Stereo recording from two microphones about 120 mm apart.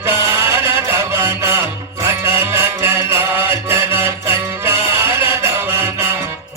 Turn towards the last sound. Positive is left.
turn(degrees=-20)  # may be behind; listen again after turning